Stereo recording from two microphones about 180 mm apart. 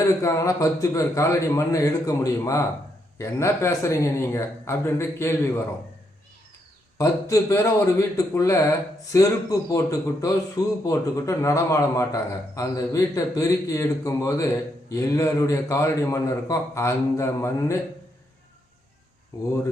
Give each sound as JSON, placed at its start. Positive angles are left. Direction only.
{"t": 0.0, "sound": "a man's voice", "side_deg": 20}
{"t": 7.0, "sound": "a man's voice", "side_deg": 20}
{"t": 19.3, "sound": "a man's voice", "side_deg": 20}